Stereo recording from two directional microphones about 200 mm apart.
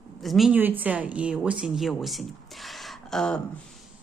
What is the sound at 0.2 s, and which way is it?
Speech, centre (ahead or behind).